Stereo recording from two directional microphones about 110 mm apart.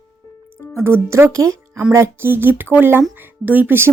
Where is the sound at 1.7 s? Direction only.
15° right (ahead or behind).